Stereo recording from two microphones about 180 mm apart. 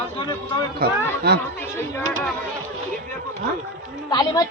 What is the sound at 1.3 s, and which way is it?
Speech, 65° right (ahead or behind).